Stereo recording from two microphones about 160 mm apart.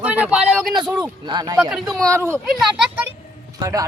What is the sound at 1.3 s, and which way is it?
Speech, 25° right (ahead or behind).